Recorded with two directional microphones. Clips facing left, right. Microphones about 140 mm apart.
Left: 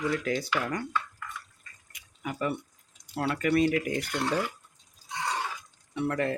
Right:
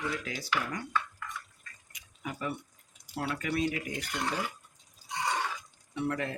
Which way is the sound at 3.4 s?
65° left (ahead or behind).